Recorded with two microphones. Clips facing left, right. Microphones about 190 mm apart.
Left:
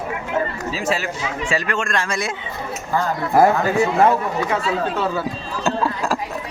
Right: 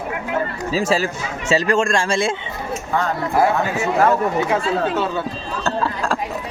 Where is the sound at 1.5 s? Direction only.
30° right (ahead or behind).